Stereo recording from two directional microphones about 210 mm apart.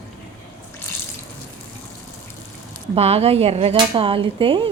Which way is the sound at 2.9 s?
30° right (ahead or behind).